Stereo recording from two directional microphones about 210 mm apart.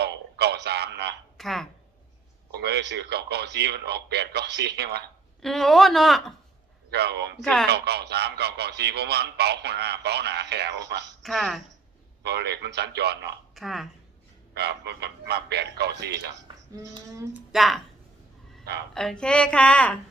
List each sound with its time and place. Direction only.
0.0 s a sound: 50° right (ahead or behind)
1.4 s speech: centre (ahead or behind)
2.5 s a man's voice: 50° right (ahead or behind)
5.4 s speech: centre (ahead or behind)
6.9 s a man's voice: 50° right (ahead or behind)
11.2 s speech: centre (ahead or behind)
12.2 s a man's voice: 55° right (ahead or behind)
13.6 s speech: centre (ahead or behind)
14.5 s a man's voice: 55° right (ahead or behind)
16.7 s speech: 15° right (ahead or behind)
17.5 s speech: centre (ahead or behind)
18.6 s speech: 50° right (ahead or behind)
18.9 s speech: 5° left (ahead or behind)